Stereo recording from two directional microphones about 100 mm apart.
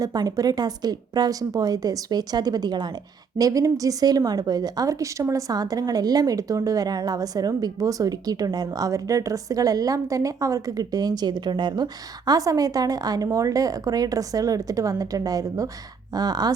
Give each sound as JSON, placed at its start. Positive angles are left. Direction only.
{"t": 0.0, "sound": "a woman's voice", "side_deg": -40}